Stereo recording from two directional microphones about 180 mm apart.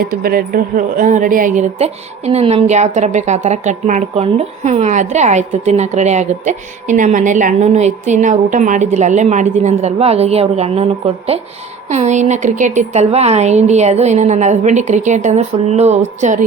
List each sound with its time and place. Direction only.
0.0 s a woman's voice: 55° right (ahead or behind)